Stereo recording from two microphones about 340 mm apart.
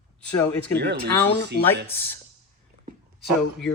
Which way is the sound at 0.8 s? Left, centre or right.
Right.